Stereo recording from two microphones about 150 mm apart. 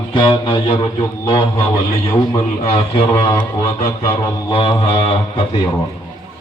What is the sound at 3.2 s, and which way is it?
Speech, 25° left (ahead or behind).